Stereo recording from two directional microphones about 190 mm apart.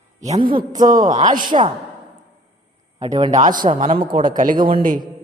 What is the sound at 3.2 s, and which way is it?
A man's voice, 35° right (ahead or behind).